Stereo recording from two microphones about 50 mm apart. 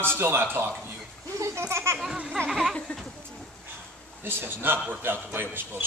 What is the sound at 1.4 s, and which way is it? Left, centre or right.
Speech, right.